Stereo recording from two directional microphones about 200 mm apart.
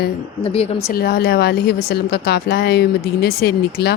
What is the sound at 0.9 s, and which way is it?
Speech, 55° left (ahead or behind).